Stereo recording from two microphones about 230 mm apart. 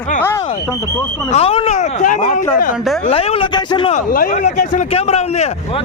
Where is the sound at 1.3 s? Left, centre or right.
Left.